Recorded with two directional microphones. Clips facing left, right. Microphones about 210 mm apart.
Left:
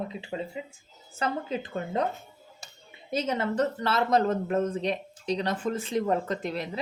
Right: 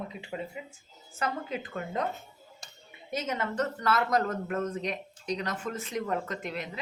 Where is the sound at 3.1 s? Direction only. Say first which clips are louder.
Left 4 dB; 30° left (ahead or behind).